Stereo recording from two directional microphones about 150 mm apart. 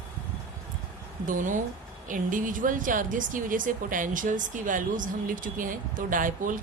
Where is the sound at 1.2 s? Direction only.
60° right (ahead or behind).